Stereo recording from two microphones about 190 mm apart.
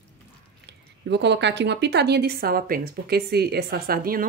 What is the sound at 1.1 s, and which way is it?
Speech, 65° right (ahead or behind).